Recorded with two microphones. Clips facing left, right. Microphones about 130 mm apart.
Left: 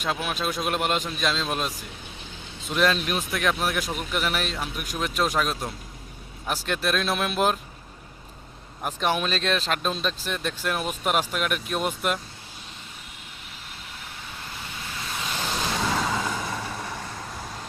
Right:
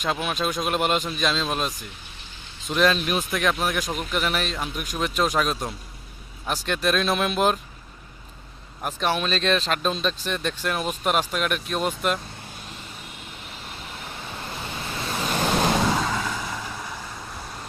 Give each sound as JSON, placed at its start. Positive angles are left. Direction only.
{"t": 0.0, "sound": "speech", "side_deg": 0}
{"t": 9.0, "sound": "speech", "side_deg": 10}
{"t": 14.3, "sound": "waves", "side_deg": -35}
{"t": 15.1, "sound": "a sound", "side_deg": -50}
{"t": 16.0, "sound": "vehicle", "side_deg": 5}